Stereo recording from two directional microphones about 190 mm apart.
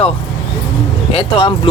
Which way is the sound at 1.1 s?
30° left (ahead or behind).